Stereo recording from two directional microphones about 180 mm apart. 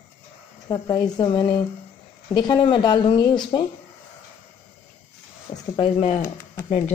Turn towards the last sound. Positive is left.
turn(degrees=40)  # may be behind; listen again after turning